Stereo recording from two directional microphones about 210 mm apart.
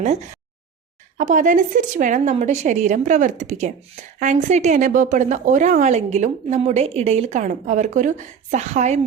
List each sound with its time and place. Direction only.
1.2 s a woman's voice: 35° right (ahead or behind)